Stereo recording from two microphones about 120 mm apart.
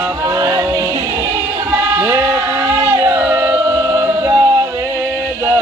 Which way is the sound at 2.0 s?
30° right (ahead or behind).